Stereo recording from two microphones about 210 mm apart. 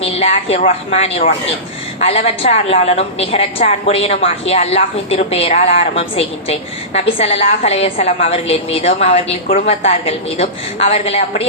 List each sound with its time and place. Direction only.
0.0 s a woman's voice: 30° left (ahead or behind)